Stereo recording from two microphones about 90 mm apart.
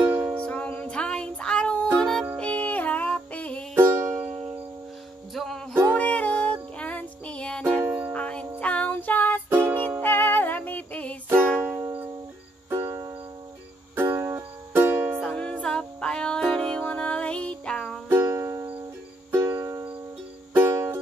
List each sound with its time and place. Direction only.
0.0 s music: 25° right (ahead or behind)
0.5 s music: 15° left (ahead or behind)
3.7 s music: 30° right (ahead or behind)
5.3 s music: 5° left (ahead or behind)
5.9 s music: 15° left (ahead or behind)
7.6 s music: 25° right (ahead or behind)
8.1 s music: 15° left (ahead or behind)
9.5 s music: 30° right (ahead or behind)
10.0 s music: 20° left (ahead or behind)
12.6 s music: 30° right (ahead or behind)
15.1 s music: 10° left (ahead or behind)
18.0 s music: 30° right (ahead or behind)